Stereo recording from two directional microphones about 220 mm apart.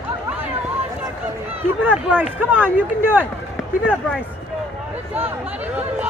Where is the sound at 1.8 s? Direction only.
5° right (ahead or behind).